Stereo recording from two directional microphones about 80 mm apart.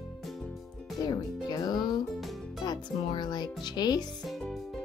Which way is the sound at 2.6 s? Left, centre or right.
Left.